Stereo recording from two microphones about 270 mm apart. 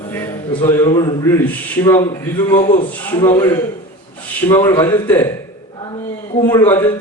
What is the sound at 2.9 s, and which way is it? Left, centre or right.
A man's voice, centre.